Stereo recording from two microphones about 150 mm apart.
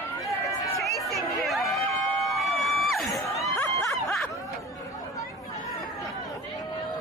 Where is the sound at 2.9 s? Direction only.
Centre (ahead or behind).